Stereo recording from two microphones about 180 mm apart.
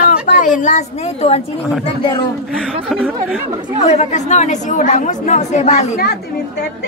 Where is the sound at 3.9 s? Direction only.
40° left (ahead or behind).